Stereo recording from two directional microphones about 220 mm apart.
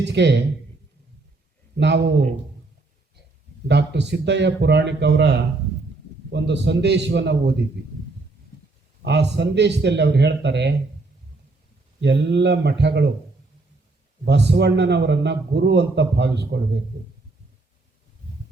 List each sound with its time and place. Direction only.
0.0 s a man's voice: 50° right (ahead or behind)
1.8 s a man's voice: 50° right (ahead or behind)
3.7 s a man's voice: 50° right (ahead or behind)
9.0 s a man's voice: 50° right (ahead or behind)
11.9 s a man's voice: 50° right (ahead or behind)
14.3 s a man's voice: 50° right (ahead or behind)